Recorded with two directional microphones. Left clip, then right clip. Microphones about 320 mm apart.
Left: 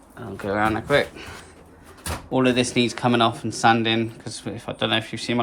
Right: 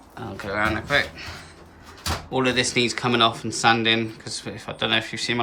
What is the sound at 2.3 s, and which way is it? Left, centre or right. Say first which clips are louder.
Speech: left 1 dB; centre.